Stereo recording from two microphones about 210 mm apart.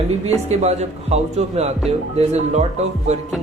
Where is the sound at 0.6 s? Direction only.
30° right (ahead or behind).